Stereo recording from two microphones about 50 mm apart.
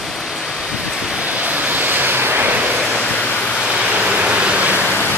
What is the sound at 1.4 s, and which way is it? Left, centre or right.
Vehicle, right.